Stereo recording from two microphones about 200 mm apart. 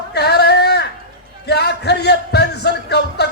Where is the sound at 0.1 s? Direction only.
55° left (ahead or behind).